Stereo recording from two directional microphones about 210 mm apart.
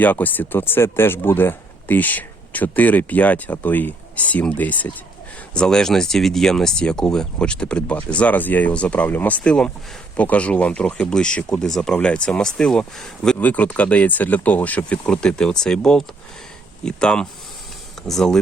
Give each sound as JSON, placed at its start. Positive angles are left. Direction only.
{"t": 0.0, "sound": "speech", "side_deg": 10}